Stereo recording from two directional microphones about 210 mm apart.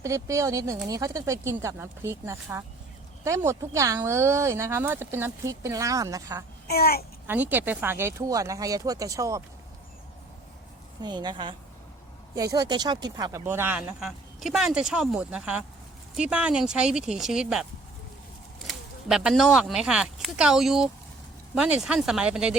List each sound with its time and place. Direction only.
0.0 s speech: 15° right (ahead or behind)
6.7 s a child's voice: 45° left (ahead or behind)
7.3 s speech: 10° right (ahead or behind)
11.0 s speech: 20° right (ahead or behind); by 17.7 s 5° right (ahead or behind)
18.7 s speech: centre (ahead or behind)